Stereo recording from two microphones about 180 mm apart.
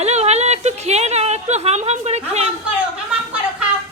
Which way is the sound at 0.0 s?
35° right (ahead or behind).